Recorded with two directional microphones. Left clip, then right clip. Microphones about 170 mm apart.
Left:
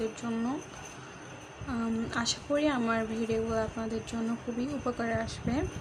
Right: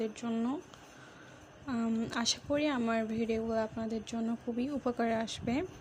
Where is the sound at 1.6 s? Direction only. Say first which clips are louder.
Left 1 dB; 40° right (ahead or behind).